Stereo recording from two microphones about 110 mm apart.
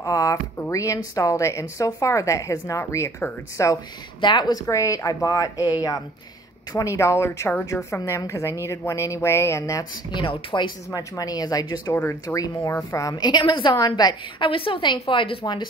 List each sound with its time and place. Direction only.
0.0 s a sound: 30° left (ahead or behind)
0.9 s a woman's voice: 30° left (ahead or behind)
4.2 s a woman's voice: 45° left (ahead or behind); by 9.8 s 25° left (ahead or behind)
10.1 s a woman's voice: 50° left (ahead or behind)
10.9 s a woman's voice: 30° left (ahead or behind)
11.9 s a woman's voice: 20° left (ahead or behind); by 14.5 s 40° left (ahead or behind)
14.5 s a woman's voice: 55° left (ahead or behind)